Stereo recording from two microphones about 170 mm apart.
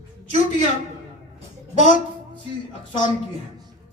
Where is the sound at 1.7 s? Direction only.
45° left (ahead or behind).